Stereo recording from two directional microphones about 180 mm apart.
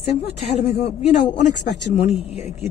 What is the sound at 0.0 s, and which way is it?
A woman's voice, 35° left (ahead or behind).